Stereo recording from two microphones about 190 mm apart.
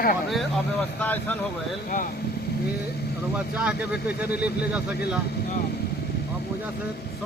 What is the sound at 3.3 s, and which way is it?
Speech, 5° right (ahead or behind).